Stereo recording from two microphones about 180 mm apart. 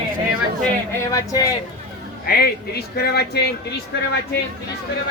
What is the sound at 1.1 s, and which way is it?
Speech, 20° left (ahead or behind).